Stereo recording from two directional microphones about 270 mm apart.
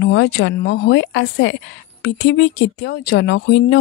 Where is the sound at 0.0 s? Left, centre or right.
Left.